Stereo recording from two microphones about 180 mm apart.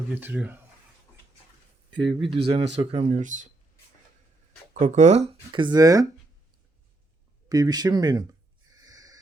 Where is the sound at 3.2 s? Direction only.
45° right (ahead or behind).